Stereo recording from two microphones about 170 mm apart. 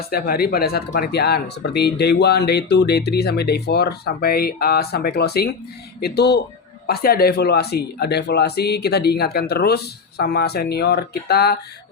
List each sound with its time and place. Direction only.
0.1 s speech: 65° left (ahead or behind)